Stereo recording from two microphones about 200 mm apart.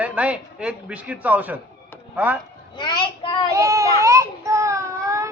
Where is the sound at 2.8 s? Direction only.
20° left (ahead or behind).